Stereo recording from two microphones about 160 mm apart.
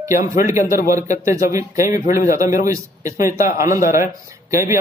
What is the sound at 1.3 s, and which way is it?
Speech, 20° right (ahead or behind).